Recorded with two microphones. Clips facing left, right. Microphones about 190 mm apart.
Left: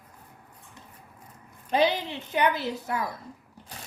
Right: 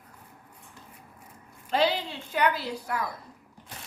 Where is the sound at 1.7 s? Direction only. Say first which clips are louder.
Left 2 dB; 20° left (ahead or behind).